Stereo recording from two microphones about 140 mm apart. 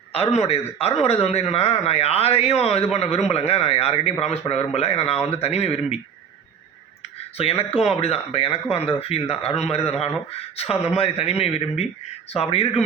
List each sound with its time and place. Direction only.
0.1 s speech: 45° left (ahead or behind)
7.6 s speech: 45° left (ahead or behind)